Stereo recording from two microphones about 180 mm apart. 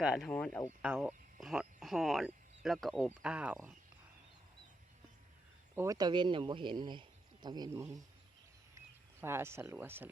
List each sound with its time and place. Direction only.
0.0 s speech: 5° right (ahead or behind)
0.3 s speech: 5° left (ahead or behind)
0.8 s speech: 5° right (ahead or behind)
5.7 s speech: 15° right (ahead or behind)
9.2 s speech: 15° right (ahead or behind)